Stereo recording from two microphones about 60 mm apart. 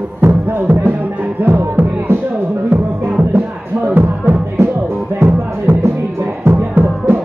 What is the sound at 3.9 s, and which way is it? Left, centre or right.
Music, right.